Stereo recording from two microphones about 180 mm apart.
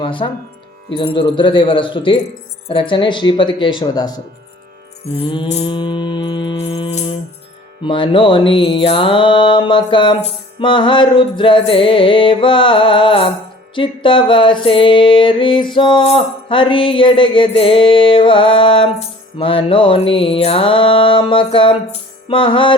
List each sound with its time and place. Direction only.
0.0 s speech: 30° left (ahead or behind)
0.9 s music: 30° left (ahead or behind)
5.1 s mantra: 30° left (ahead or behind)
7.9 s music: 25° left (ahead or behind)